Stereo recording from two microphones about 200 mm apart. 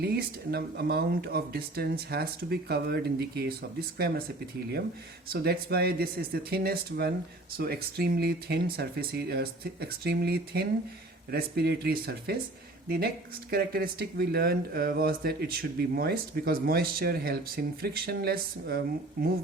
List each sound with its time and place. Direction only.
0.0 s speech: 50° right (ahead or behind)
5.3 s speech: 50° right (ahead or behind)
13.5 s speech: 50° right (ahead or behind)